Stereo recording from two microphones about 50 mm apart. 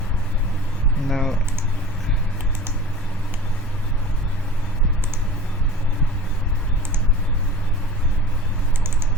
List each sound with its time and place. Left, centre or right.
1.0 s speech: centre